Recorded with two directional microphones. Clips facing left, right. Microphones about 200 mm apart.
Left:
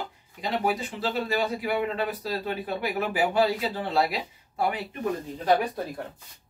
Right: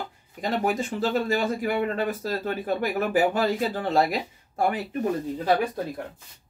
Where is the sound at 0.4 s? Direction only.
45° right (ahead or behind).